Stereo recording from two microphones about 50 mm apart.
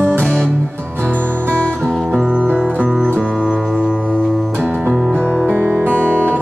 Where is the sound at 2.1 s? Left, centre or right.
Centre.